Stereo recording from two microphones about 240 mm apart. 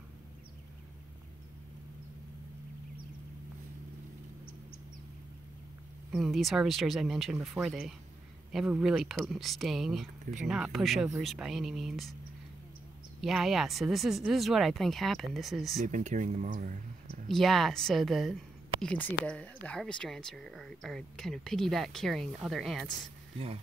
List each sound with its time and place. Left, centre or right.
6.1 s speech: centre
13.2 s speech: centre
15.9 s speech: right
17.3 s speech: centre